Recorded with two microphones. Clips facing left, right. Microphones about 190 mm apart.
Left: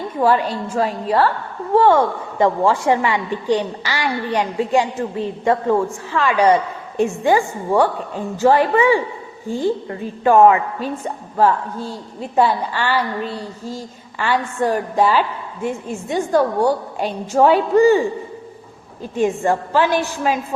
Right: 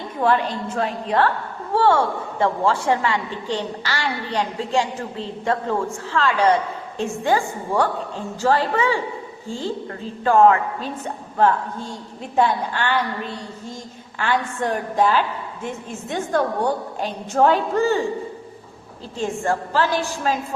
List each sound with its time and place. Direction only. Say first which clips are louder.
0.2 s a woman's voice: left 3 dB; 5° left (ahead or behind)
1.7 s a woman's voice: left 4 dB; 15° left (ahead or behind)
14.3 s a woman's voice: left 3 dB; 5° left (ahead or behind)
19.1 s a woman's voice: left 5 dB; 15° left (ahead or behind)